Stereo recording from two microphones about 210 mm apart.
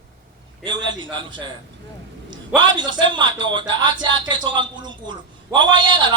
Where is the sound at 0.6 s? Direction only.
20° right (ahead or behind).